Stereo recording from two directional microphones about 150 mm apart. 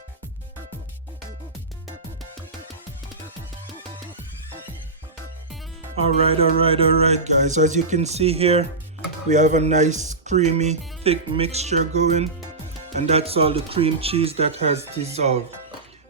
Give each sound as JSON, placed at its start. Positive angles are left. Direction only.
{"t": 6.0, "sound": "speech", "side_deg": -40}
{"t": 9.3, "sound": "speech", "side_deg": -55}